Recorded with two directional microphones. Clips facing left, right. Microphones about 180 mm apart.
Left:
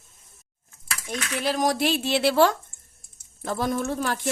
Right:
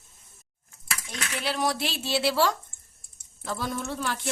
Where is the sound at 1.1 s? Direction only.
45° left (ahead or behind).